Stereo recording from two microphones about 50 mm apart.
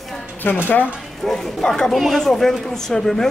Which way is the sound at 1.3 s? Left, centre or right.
Centre.